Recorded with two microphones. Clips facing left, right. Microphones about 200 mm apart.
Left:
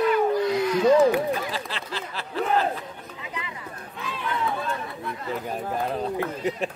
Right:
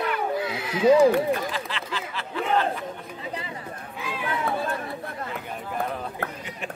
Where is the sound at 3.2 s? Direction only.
35° right (ahead or behind).